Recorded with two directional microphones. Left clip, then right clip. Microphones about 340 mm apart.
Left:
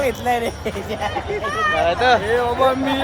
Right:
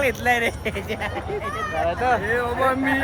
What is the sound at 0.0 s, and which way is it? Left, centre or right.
Speech, centre.